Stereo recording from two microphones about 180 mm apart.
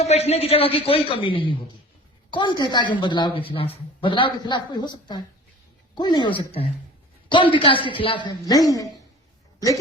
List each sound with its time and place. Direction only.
0.0 s a man's voice: 35° left (ahead or behind); by 8.9 s 20° left (ahead or behind)